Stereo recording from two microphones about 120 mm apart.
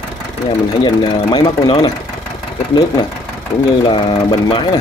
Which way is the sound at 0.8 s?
35° left (ahead or behind).